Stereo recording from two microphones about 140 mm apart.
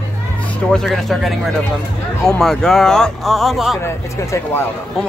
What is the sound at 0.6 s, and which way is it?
Speech, 5° left (ahead or behind).